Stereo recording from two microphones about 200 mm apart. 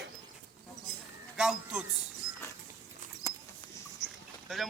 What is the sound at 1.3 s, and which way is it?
Speech, 5° right (ahead or behind).